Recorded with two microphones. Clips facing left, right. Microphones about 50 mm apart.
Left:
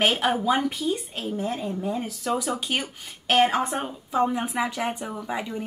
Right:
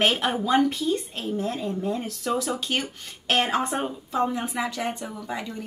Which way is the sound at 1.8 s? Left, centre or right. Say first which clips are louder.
Even; centre.